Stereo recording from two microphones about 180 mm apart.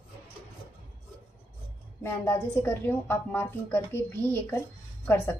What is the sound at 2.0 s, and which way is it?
A woman's voice, 15° left (ahead or behind).